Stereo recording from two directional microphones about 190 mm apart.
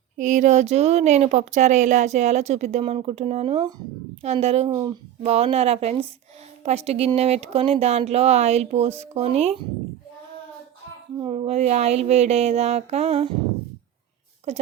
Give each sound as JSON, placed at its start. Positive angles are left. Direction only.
{"t": 0.2, "sound": "a woman's voice", "side_deg": -40}
{"t": 11.2, "sound": "a woman's voice", "side_deg": -30}
{"t": 14.5, "sound": "a woman's voice", "side_deg": -35}